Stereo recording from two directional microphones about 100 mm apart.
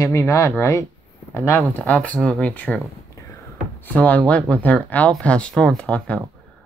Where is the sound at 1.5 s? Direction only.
15° left (ahead or behind).